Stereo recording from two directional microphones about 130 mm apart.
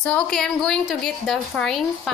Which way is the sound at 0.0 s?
10° left (ahead or behind).